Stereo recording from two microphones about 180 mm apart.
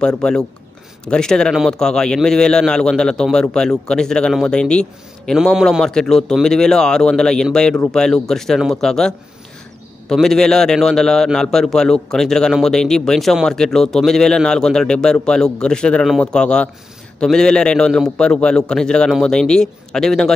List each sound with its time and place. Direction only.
0.0 s a man's voice: 5° left (ahead or behind)